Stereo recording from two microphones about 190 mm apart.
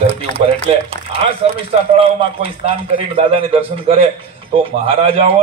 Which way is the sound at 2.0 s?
30° right (ahead or behind).